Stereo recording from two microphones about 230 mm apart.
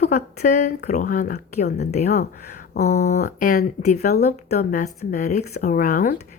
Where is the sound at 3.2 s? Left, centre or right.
Left.